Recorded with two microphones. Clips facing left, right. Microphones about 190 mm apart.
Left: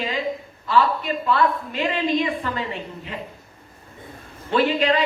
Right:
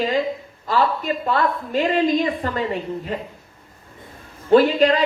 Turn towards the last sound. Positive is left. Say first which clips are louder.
# right 5 dB
turn(degrees=-45)  # may be behind; listen again after turning